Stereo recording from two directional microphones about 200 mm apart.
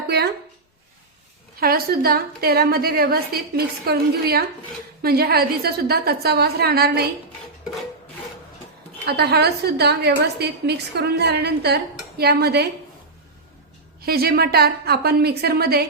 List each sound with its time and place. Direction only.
1.5 s a woman's voice: 50° right (ahead or behind)
9.0 s a woman's voice: 55° right (ahead or behind)
14.0 s a woman's voice: 50° right (ahead or behind)